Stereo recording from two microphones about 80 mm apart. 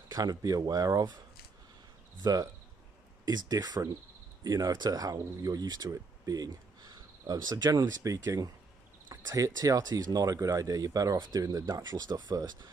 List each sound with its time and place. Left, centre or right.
0.1 s speech: right
2.2 s speech: right
7.9 s speech: right
11.1 s speech: right
11.4 s speech: right